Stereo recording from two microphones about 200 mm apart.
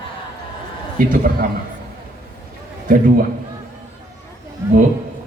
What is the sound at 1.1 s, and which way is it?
Speech, 45° right (ahead or behind).